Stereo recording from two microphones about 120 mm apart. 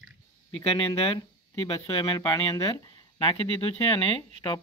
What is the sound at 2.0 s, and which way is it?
Speech, 35° left (ahead or behind).